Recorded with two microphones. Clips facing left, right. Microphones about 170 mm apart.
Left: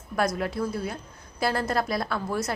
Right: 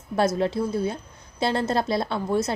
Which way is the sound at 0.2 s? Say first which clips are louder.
Right 4 dB; 25° right (ahead or behind).